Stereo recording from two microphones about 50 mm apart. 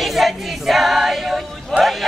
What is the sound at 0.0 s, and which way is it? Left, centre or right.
Music, centre.